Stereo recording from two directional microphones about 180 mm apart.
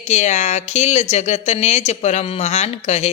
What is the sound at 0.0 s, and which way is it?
Speech, 40° left (ahead or behind).